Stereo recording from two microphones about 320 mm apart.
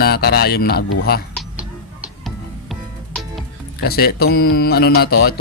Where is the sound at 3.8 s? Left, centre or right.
Left.